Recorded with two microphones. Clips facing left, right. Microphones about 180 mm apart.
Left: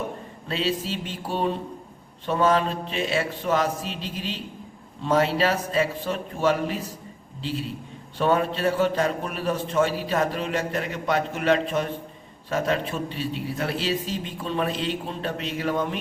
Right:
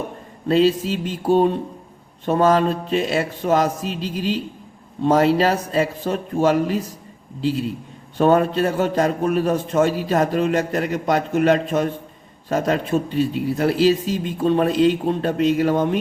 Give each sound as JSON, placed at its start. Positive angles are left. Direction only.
{"t": 0.4, "sound": "a man's voice", "side_deg": -45}
{"t": 8.2, "sound": "a man's voice", "side_deg": -45}